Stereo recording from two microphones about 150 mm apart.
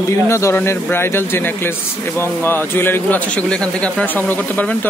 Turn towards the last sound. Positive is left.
turn(degrees=10)  # may be behind; listen again after turning